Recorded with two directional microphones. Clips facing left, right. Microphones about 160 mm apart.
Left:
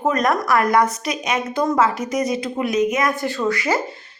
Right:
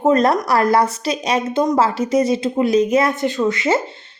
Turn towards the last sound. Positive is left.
turn(degrees=-25)  # may be behind; listen again after turning